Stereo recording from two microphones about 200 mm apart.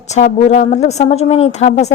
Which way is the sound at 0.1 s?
35° left (ahead or behind).